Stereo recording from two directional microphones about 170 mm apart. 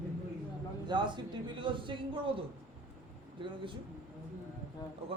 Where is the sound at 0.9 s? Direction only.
25° right (ahead or behind).